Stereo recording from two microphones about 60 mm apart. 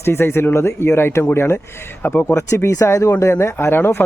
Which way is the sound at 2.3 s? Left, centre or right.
Left.